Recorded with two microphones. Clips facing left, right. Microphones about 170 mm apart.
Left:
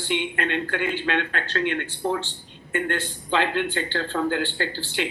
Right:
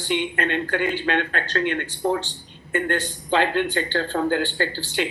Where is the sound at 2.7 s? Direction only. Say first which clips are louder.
Right 2 dB; 40° right (ahead or behind).